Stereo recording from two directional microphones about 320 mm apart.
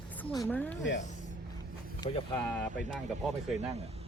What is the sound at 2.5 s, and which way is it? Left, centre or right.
Speech, centre.